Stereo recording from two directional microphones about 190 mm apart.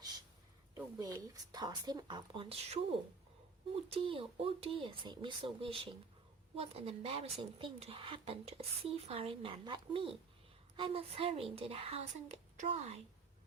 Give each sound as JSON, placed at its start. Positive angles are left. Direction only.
{"t": 0.9, "sound": "speech", "side_deg": -20}